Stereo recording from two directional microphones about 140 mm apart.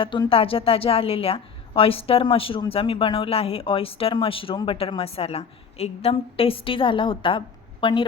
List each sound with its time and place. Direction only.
0.0 s a woman's voice: 35° left (ahead or behind)